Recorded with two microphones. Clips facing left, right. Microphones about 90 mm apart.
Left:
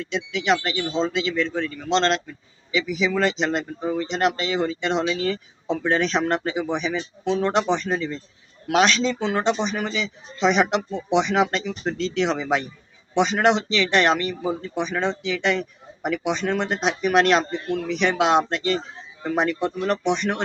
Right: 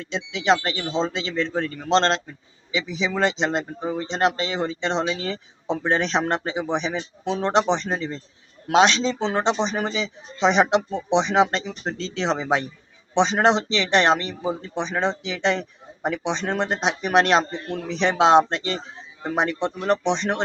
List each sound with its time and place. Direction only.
0.0 s speech: 30° right (ahead or behind)
17.7 s speech: 35° right (ahead or behind)